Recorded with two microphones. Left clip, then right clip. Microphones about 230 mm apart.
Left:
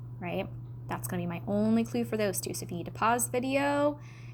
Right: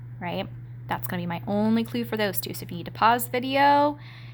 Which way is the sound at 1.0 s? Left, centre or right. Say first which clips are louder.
Right 5 dB; right.